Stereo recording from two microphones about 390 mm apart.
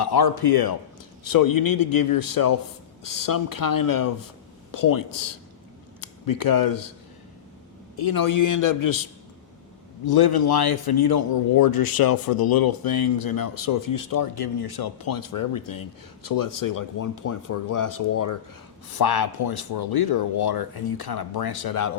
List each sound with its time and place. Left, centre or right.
0.0 s speech: left
1.2 s speech: left
7.9 s speech: left
10.1 s speech: left
18.9 s speech: left